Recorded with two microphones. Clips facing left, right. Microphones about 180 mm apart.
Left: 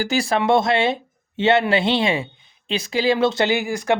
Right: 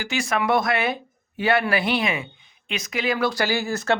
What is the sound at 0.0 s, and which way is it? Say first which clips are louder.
Speech: left 4 dB; 35° left (ahead or behind).